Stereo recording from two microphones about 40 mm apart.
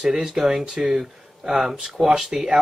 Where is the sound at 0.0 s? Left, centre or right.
Centre.